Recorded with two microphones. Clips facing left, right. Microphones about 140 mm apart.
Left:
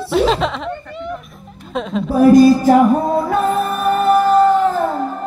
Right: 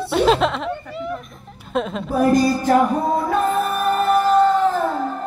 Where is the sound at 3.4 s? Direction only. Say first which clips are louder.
Left 2 dB; centre (ahead or behind).